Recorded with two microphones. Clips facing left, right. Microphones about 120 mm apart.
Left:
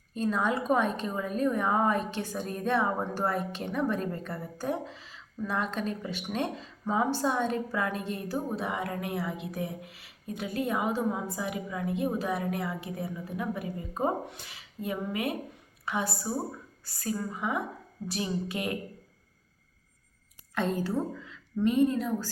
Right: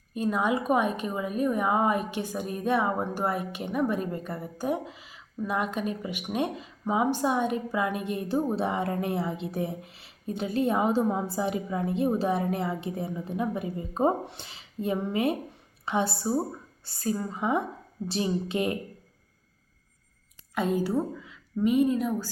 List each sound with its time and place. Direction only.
0.1 s a woman's voice: 10° right (ahead or behind)
20.6 s a woman's voice: 10° right (ahead or behind)